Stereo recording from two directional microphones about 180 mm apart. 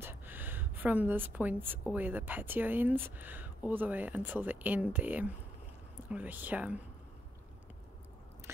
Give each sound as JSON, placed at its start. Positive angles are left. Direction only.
{"t": 0.0, "sound": "a woman's voice", "side_deg": -10}